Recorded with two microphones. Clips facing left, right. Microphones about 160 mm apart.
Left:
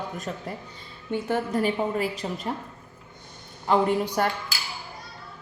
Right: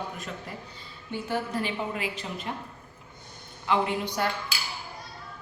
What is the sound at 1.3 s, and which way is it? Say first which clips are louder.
A woman's voice: left 5 dB; 45° left (ahead or behind).